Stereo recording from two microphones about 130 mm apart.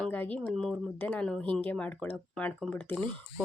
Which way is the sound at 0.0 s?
10° left (ahead or behind).